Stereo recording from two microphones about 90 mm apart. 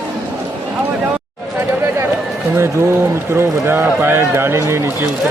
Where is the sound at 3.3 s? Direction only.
25° right (ahead or behind).